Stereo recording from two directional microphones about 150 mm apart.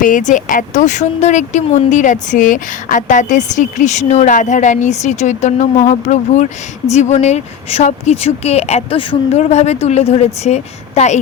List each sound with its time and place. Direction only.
0.0 s speech: 60° left (ahead or behind)